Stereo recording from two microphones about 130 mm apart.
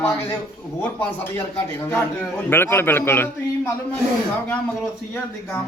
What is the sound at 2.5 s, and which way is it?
Speech, 15° left (ahead or behind).